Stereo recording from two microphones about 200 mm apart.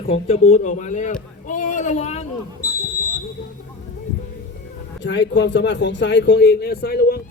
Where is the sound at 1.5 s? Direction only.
40° left (ahead or behind).